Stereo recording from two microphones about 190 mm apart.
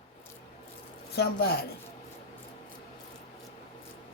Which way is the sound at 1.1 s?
60° left (ahead or behind).